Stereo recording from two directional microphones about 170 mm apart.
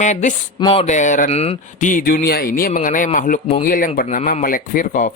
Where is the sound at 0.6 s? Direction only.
35° left (ahead or behind).